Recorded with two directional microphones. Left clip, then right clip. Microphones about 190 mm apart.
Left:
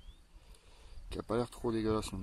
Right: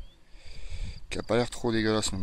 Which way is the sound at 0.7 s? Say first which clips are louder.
Right 10 dB; 15° right (ahead or behind).